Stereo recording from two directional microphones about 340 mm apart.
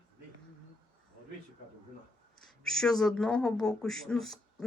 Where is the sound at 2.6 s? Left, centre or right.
Centre.